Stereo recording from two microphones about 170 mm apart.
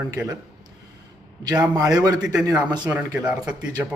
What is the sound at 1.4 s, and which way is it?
A man's voice, 25° right (ahead or behind).